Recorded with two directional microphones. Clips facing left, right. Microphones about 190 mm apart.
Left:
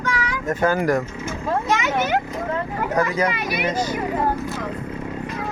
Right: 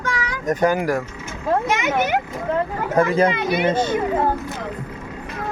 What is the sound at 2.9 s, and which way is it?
A child's voice, 25° right (ahead or behind).